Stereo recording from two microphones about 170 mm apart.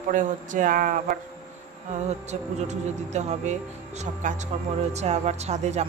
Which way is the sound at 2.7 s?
40° right (ahead or behind).